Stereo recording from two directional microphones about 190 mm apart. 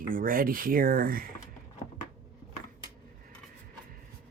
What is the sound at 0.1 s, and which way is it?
Speech, 45° right (ahead or behind).